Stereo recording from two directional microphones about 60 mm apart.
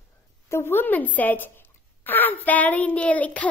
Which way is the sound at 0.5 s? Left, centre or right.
Left.